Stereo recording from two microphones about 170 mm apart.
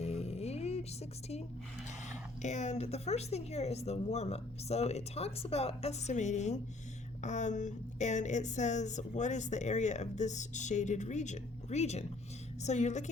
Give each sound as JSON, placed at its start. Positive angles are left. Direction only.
{"t": 0.0, "sound": "music", "side_deg": 40}
{"t": 2.0, "sound": "speech", "side_deg": 45}